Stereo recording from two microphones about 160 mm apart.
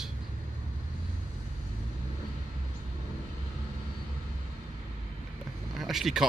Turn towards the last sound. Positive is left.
turn(degrees=0)  # may be behind; listen again after turning